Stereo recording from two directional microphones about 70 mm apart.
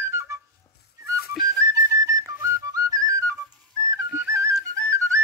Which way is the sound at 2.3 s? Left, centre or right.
Right.